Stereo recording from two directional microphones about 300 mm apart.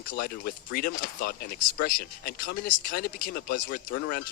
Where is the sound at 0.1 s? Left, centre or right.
Left.